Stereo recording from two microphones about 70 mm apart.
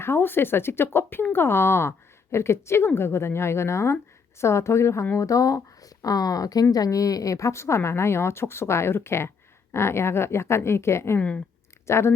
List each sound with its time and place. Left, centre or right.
0.0 s speech: left
5.1 s speech: left
11.2 s speech: centre
11.9 s speech: left